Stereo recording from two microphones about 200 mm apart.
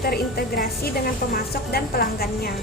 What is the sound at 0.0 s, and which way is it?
A woman's voice, 50° left (ahead or behind).